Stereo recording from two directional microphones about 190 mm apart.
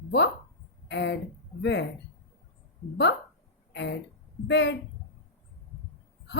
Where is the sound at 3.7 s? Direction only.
65° left (ahead or behind).